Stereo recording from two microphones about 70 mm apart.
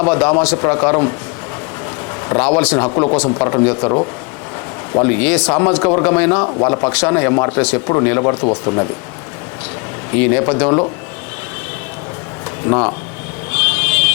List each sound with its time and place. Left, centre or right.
0.0 s a man's voice: centre
2.3 s a man's voice: centre
10.1 s a man's voice: centre
12.6 s speech: centre
13.5 s vehicle: centre